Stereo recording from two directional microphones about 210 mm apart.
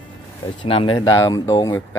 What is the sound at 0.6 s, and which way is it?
Speech, 25° left (ahead or behind).